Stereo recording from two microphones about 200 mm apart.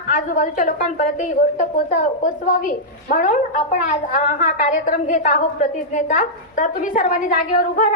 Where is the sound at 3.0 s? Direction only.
45° left (ahead or behind).